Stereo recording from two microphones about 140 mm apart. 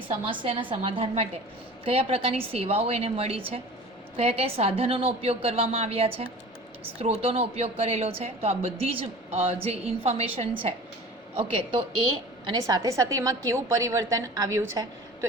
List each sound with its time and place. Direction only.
0.1 s a woman's voice: 40° right (ahead or behind)
12.6 s a woman's voice: 25° right (ahead or behind)